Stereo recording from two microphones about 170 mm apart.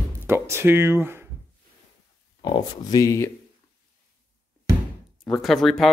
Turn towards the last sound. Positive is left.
turn(degrees=0)  # may be behind; listen again after turning